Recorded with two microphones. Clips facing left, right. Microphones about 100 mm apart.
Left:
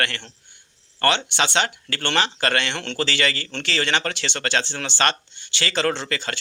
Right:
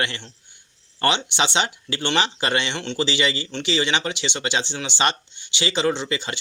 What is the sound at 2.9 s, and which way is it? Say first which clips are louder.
Speech: right 1 dB; 15° right (ahead or behind).